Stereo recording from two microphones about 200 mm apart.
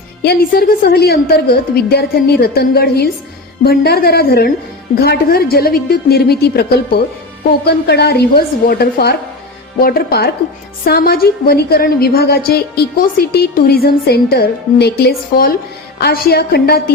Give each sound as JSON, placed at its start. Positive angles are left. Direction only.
{"t": 0.2, "sound": "a woman's voice", "side_deg": 50}